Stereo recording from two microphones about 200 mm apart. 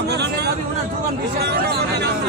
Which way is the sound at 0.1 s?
55° right (ahead or behind).